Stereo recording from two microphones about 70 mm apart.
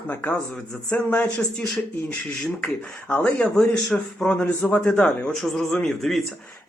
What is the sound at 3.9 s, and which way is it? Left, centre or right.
A man's voice, centre.